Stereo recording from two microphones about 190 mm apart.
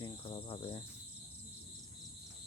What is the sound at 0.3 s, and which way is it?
Cricket, 30° left (ahead or behind).